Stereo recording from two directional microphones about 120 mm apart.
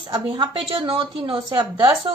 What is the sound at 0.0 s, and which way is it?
A woman's voice, 40° right (ahead or behind).